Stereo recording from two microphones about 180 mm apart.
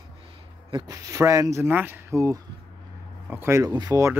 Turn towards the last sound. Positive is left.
turn(degrees=-15)  # may be behind; listen again after turning